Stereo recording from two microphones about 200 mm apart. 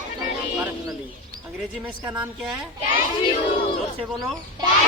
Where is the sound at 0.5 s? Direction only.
15° right (ahead or behind).